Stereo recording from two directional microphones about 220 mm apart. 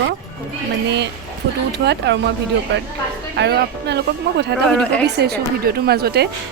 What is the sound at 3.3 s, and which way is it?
A woman's voice, 50° right (ahead or behind).